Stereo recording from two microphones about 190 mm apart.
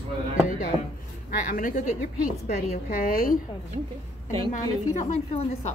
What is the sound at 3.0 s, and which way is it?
Speech, 50° left (ahead or behind).